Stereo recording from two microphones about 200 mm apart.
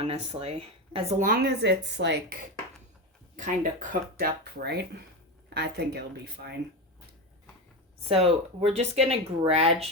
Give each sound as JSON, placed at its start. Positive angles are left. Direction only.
{"t": 0.0, "sound": "speech", "side_deg": -30}
{"t": 1.2, "sound": "speech", "side_deg": -50}
{"t": 3.3, "sound": "speech", "side_deg": -40}
{"t": 4.6, "sound": "speech", "side_deg": -55}
{"t": 8.0, "sound": "speech", "side_deg": -30}